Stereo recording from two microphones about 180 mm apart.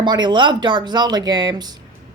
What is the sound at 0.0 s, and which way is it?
Speech, 25° right (ahead or behind).